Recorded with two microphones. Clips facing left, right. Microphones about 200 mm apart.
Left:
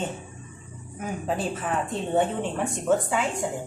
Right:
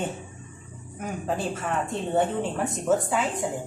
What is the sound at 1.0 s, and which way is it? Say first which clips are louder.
Speech: even; centre (ahead or behind).